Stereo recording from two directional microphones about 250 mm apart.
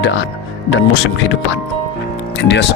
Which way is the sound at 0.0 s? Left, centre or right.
Left.